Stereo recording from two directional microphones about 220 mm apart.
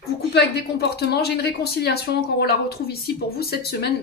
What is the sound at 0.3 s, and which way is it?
Speech, 50° left (ahead or behind).